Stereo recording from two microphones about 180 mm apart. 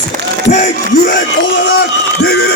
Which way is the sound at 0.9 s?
55° left (ahead or behind).